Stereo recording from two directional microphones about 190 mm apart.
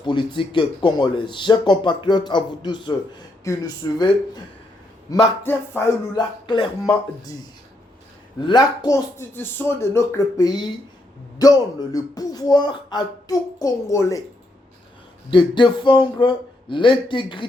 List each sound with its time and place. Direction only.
0.0 s speech: 25° left (ahead or behind)
6.1 s speech: 25° left (ahead or behind)
8.4 s speech: 20° left (ahead or behind)
15.3 s speech: 25° left (ahead or behind)